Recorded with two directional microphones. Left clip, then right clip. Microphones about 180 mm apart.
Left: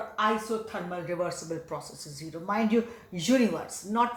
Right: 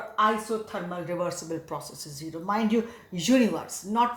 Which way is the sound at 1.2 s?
35° right (ahead or behind).